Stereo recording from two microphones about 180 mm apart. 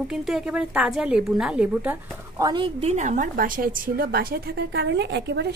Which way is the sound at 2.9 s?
45° right (ahead or behind).